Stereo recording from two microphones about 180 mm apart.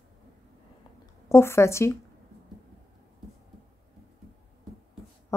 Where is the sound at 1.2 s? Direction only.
15° left (ahead or behind).